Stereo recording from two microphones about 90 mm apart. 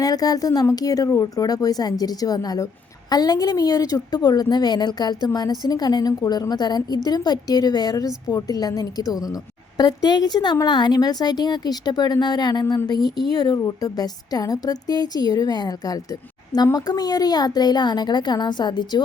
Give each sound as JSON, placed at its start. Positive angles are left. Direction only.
{"t": 0.0, "sound": "a woman's voice", "side_deg": 45}